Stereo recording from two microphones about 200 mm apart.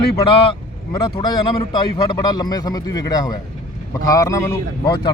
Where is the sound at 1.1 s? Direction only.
20° left (ahead or behind).